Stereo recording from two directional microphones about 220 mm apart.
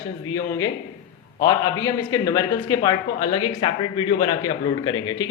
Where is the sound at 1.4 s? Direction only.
15° left (ahead or behind).